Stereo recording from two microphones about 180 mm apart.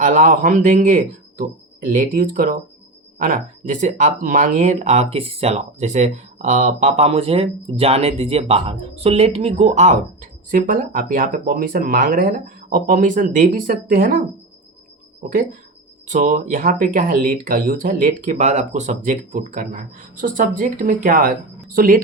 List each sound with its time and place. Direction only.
0.0 s speech: 45° right (ahead or behind)
16.0 s speech: 45° right (ahead or behind)